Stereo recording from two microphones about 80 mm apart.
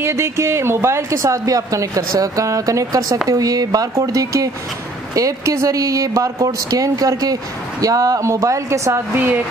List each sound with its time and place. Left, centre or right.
0.0 s a woman's voice: right
9.1 s a woman's voice: right